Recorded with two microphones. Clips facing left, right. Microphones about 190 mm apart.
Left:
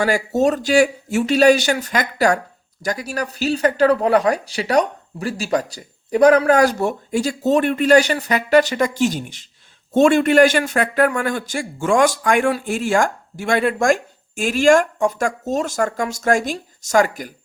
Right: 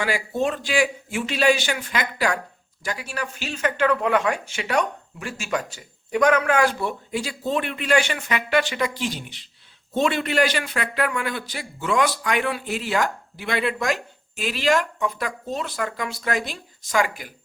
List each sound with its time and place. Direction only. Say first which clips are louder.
0.0 s a man's voice: left 7 dB; 40° left (ahead or behind)